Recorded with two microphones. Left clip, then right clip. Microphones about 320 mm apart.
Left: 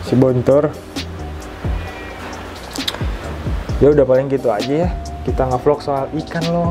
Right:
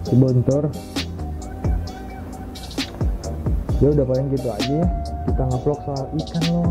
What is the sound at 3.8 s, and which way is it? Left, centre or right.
Speech, centre.